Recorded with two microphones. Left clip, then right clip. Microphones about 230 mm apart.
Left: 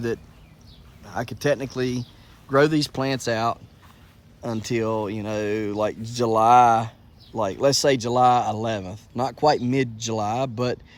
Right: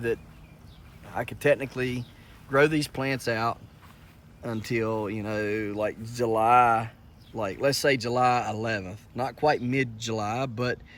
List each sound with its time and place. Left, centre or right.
1.2 s speech: left
5.9 s speech: left
6.2 s speech: centre